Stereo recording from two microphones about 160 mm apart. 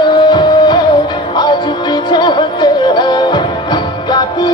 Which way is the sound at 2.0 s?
30° left (ahead or behind).